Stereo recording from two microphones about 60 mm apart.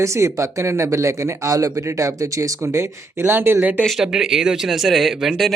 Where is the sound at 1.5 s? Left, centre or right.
Right.